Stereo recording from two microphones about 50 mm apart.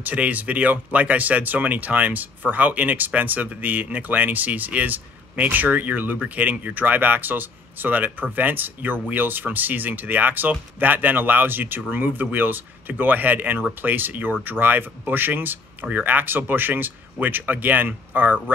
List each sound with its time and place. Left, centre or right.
0.0 s speech: right